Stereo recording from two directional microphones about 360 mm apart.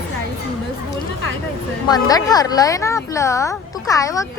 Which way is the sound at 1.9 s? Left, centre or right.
Centre.